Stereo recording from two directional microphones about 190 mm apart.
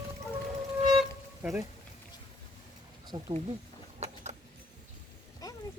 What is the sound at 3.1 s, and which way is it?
Speech, 25° right (ahead or behind).